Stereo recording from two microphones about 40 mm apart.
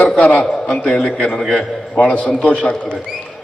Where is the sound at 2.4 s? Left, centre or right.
Left.